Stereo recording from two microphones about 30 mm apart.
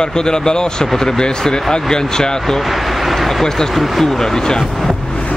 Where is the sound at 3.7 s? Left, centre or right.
Centre.